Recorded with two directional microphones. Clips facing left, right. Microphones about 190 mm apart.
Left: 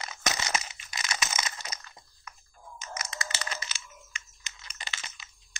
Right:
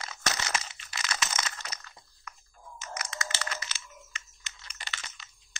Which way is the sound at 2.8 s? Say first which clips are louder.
Even; 20° left (ahead or behind).